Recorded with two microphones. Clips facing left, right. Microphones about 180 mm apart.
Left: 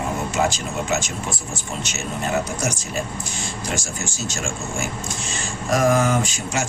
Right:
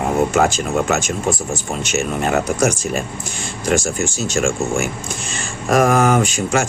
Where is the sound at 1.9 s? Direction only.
65° right (ahead or behind).